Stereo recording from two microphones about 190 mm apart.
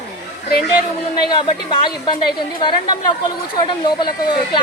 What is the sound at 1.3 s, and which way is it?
A woman's voice, 25° left (ahead or behind).